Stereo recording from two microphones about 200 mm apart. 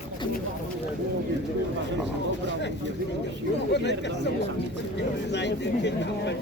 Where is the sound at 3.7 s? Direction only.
60° left (ahead or behind).